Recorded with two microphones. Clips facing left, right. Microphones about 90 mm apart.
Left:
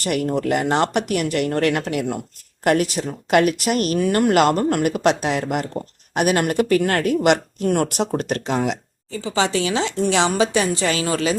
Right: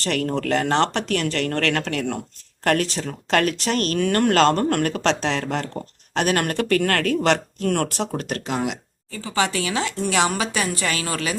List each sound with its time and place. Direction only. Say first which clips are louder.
0.0 s speech: left 2 dB; 15° left (ahead or behind)
8.1 s speech: left 4 dB; 30° left (ahead or behind)